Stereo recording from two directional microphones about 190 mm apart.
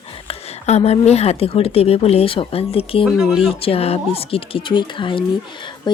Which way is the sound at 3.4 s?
30° left (ahead or behind).